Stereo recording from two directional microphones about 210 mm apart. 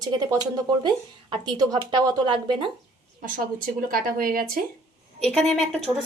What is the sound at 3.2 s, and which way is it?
Speech, 40° right (ahead or behind).